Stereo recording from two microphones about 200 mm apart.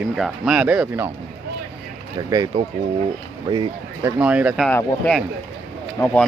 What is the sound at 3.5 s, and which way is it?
Speech, 20° right (ahead or behind).